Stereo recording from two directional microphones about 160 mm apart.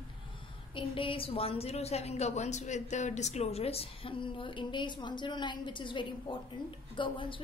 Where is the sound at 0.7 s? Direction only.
35° left (ahead or behind).